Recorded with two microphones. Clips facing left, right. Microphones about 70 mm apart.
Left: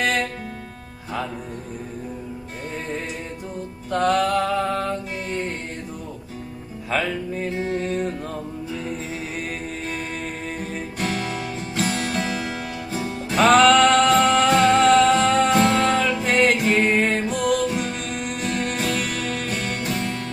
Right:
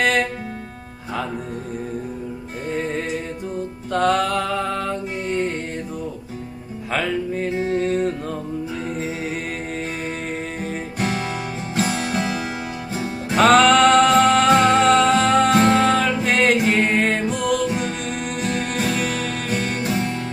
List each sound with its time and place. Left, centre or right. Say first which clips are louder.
3.9 s music: right 1 dB; centre
4.4 s music: left 1 dB; centre
6.9 s music: right 2 dB; centre
11.0 s music: right 2 dB; centre
15.4 s music: right 2 dB; centre
15.8 s music: right 2 dB; centre